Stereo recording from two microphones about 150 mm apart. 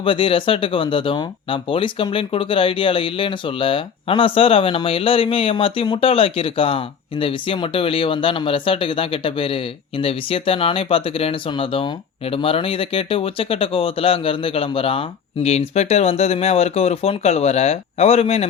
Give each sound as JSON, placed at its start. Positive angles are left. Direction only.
{"t": 0.0, "sound": "speech", "side_deg": 35}